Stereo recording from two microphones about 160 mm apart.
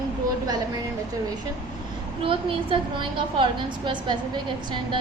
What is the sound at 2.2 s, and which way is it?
A woman's voice, 30° right (ahead or behind).